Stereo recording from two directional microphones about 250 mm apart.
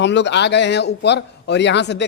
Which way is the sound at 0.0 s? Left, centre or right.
Left.